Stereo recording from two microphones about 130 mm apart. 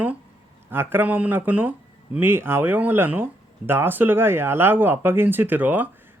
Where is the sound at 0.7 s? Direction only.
15° right (ahead or behind).